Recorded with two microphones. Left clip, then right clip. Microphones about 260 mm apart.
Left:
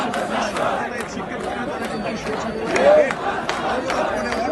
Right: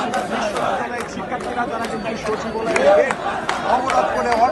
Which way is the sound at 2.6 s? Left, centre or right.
Right.